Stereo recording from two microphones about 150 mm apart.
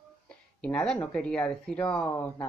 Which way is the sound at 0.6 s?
5° left (ahead or behind).